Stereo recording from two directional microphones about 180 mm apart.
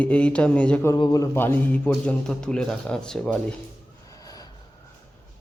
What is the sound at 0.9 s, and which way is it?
A man's voice, 20° left (ahead or behind).